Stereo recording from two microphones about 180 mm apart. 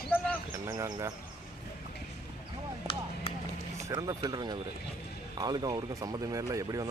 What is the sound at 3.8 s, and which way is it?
Speech, 20° right (ahead or behind).